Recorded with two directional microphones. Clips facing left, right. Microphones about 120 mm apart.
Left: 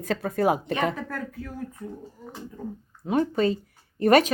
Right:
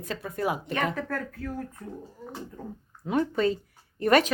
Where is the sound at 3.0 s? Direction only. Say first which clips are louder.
Left 2 dB; 30° left (ahead or behind).